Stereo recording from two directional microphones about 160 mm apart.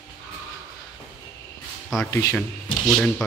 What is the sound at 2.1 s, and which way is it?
Speech, 15° left (ahead or behind).